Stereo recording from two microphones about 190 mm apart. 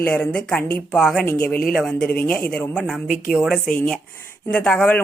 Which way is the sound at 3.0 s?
45° left (ahead or behind).